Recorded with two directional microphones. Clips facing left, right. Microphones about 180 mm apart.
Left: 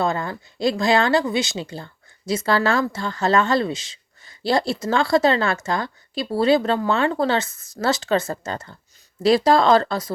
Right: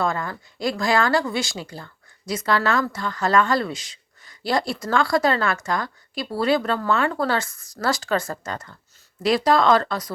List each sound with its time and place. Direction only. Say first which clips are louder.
0.0 s speech: left 2 dB; 25° left (ahead or behind)